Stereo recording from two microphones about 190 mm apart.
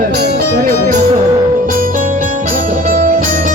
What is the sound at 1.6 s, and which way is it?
Music, 45° right (ahead or behind).